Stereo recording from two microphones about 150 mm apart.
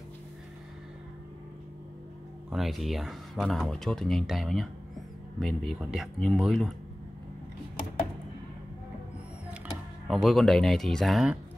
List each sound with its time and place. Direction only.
2.5 s speech: centre (ahead or behind)
10.0 s speech: centre (ahead or behind)